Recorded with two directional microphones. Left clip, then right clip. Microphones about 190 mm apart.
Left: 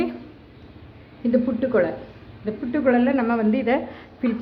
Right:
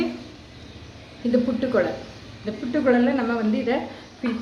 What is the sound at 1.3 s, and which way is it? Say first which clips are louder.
A woman's voice: left 1 dB; 25° left (ahead or behind).